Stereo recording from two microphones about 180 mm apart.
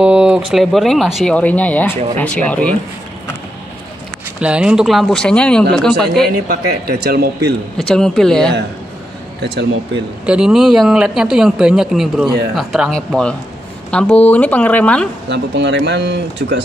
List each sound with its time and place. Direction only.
0.0 s speech: 5° right (ahead or behind)
4.4 s speech: 5° right (ahead or behind)
6.5 s speech: 55° right (ahead or behind)
7.7 s speech: 5° left (ahead or behind)
10.2 s speech: 5° right (ahead or behind)
15.2 s speech: 70° right (ahead or behind)